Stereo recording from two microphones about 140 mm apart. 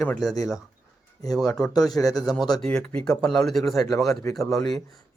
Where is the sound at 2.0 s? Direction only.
25° left (ahead or behind).